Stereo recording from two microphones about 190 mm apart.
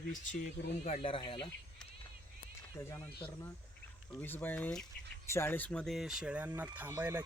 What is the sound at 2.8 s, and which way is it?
Speech, 15° left (ahead or behind).